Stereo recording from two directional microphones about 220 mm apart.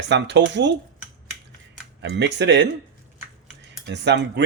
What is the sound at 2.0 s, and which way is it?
Speech, 50° right (ahead or behind).